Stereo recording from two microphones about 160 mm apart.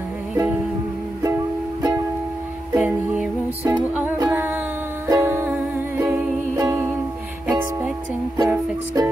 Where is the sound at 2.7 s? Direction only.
10° right (ahead or behind).